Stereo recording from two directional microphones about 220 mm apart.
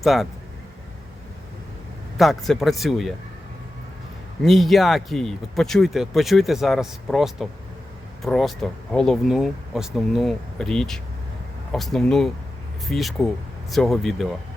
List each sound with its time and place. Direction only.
0.0 s speech: centre (ahead or behind)
2.1 s speech: centre (ahead or behind)
4.4 s speech: centre (ahead or behind)